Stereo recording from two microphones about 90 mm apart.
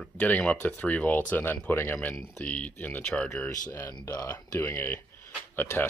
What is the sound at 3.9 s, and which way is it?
Speech, 45° left (ahead or behind).